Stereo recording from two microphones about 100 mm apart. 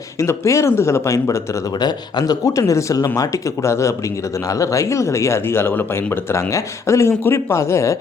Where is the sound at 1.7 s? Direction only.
45° left (ahead or behind).